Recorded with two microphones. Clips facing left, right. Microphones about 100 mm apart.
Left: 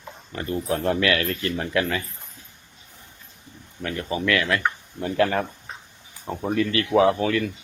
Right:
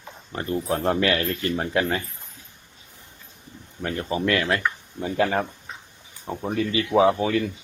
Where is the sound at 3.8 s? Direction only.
30° right (ahead or behind).